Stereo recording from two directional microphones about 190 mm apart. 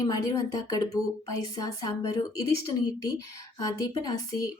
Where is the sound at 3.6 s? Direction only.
20° left (ahead or behind).